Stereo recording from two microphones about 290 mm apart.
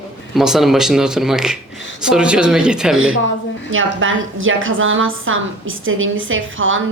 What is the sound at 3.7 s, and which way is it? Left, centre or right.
A woman's voice, right.